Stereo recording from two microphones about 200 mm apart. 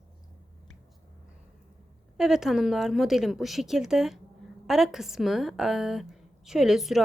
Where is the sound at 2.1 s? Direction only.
Centre (ahead or behind).